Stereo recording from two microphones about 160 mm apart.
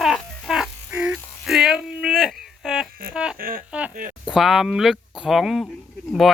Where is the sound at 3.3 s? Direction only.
65° right (ahead or behind).